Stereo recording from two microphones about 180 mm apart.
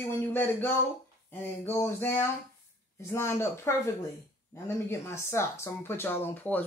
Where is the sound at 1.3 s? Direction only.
10° left (ahead or behind).